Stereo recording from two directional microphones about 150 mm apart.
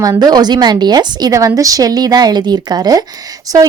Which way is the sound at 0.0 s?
25° right (ahead or behind).